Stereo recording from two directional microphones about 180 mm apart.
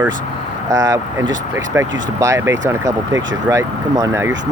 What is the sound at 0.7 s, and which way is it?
Speech, 20° right (ahead or behind).